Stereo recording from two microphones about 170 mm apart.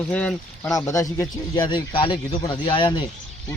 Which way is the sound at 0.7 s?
20° left (ahead or behind).